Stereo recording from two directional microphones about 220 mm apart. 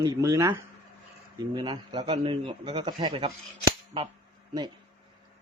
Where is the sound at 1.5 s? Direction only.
20° right (ahead or behind).